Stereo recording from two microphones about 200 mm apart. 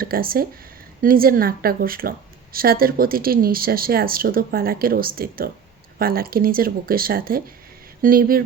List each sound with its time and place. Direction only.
0.0 s speech: 45° right (ahead or behind)